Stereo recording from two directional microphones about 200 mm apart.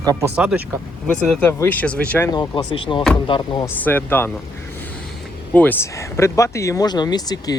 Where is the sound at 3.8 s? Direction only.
10° left (ahead or behind).